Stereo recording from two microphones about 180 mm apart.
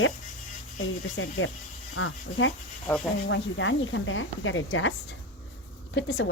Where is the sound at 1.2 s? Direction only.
90° left.